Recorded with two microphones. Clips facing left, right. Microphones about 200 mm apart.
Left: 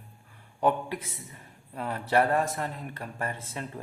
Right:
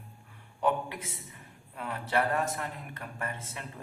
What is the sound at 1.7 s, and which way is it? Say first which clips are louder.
Speech: left 5 dB; 35° left (ahead or behind).